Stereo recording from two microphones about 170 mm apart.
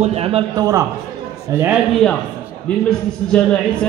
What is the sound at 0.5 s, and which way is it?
A man's voice, 20° right (ahead or behind).